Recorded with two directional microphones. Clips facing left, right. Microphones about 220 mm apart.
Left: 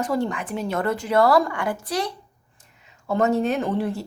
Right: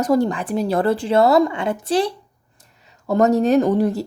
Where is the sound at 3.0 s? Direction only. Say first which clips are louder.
Right 5 dB; 40° right (ahead or behind).